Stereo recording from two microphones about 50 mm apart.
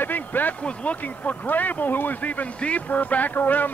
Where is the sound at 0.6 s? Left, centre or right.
Left.